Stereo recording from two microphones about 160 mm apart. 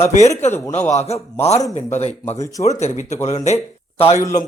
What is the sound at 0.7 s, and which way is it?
Speech, 45° left (ahead or behind).